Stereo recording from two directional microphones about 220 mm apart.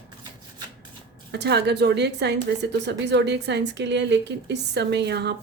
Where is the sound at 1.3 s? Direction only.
50° right (ahead or behind).